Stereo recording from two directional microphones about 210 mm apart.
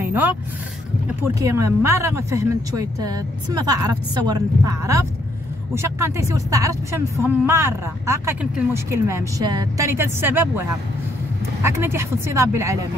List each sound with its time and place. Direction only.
0.0 s vehicle: 10° right (ahead or behind)
1.2 s speech: 15° right (ahead or behind)
11.6 s speech: 10° right (ahead or behind)